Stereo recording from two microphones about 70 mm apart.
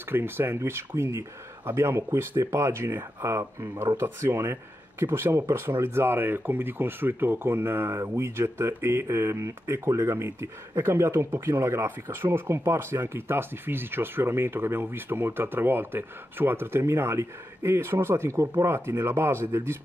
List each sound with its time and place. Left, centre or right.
0.1 s speech: right